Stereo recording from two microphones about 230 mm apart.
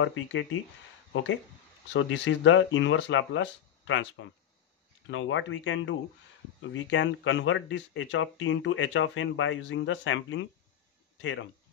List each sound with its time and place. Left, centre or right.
0.0 s speech: left